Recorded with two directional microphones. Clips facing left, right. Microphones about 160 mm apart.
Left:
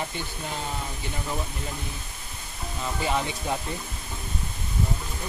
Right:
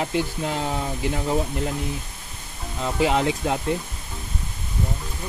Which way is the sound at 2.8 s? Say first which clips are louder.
Right 6 dB; 90° right.